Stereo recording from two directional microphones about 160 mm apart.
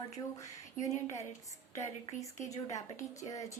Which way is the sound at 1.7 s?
20° left (ahead or behind).